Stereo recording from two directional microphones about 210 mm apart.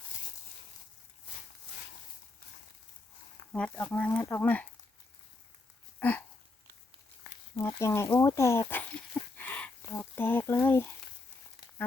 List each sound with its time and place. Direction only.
3.5 s speech: 5° left (ahead or behind)
6.0 s a sound: 10° left (ahead or behind)
7.5 s speech: 15° left (ahead or behind)
8.7 s dog: 10° left (ahead or behind)